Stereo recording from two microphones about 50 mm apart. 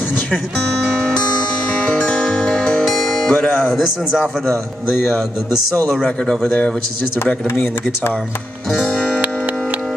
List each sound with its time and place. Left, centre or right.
3.0 s music: centre